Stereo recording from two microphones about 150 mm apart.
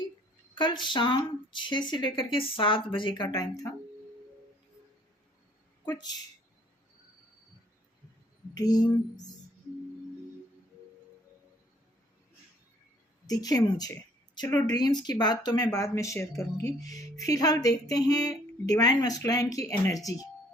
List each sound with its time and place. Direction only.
0.5 s speech: 30° left (ahead or behind)
8.5 s speech: 25° left (ahead or behind)
13.2 s a woman's voice: 25° left (ahead or behind)